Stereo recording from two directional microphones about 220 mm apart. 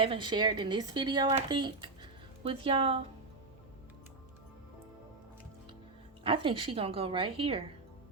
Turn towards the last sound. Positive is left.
turn(degrees=-25)  # may be behind; listen again after turning